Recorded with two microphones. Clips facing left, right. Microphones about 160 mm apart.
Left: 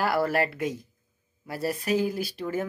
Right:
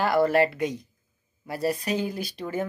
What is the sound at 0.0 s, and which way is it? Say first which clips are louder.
Speech: right 4 dB; 5° left (ahead or behind).